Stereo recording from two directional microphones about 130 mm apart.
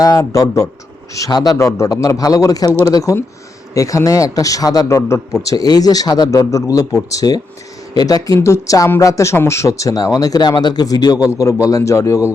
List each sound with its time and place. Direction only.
0.0 s speech: 30° left (ahead or behind)